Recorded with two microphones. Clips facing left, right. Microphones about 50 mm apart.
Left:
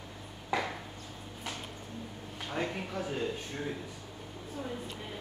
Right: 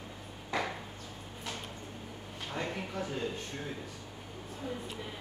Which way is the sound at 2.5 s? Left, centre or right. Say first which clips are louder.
Left 2 dB; centre.